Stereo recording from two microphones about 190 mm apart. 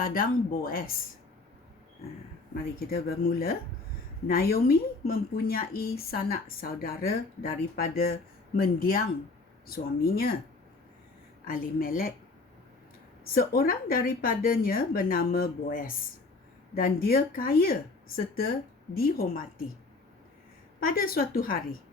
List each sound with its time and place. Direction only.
0.0 s a woman's voice: 50° left (ahead or behind)
2.7 s a woman's voice: 55° left (ahead or behind)
11.4 s a woman's voice: 50° left (ahead or behind)
13.3 s a woman's voice: 50° left (ahead or behind)
20.8 s a woman's voice: 50° left (ahead or behind)